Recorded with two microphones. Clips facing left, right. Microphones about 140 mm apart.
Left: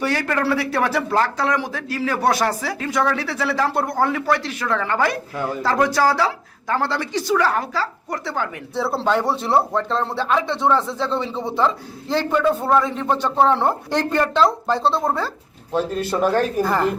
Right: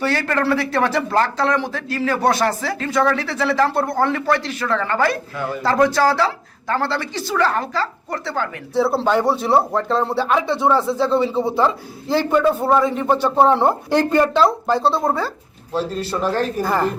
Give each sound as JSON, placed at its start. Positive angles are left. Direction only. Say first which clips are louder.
{"t": 0.0, "sound": "a man's voice", "louder": "right 1 dB", "side_deg": 15}
{"t": 8.7, "sound": "speech", "louder": "right 4 dB", "side_deg": 0}
{"t": 15.7, "sound": "a man's voice", "louder": "left 1 dB", "side_deg": 50}